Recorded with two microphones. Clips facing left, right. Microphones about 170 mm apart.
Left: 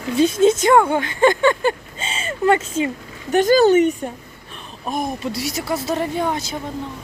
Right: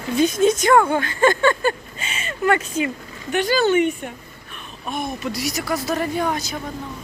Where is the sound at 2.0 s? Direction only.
30° left (ahead or behind).